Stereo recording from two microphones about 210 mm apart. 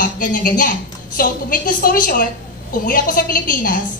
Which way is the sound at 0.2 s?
40° left (ahead or behind).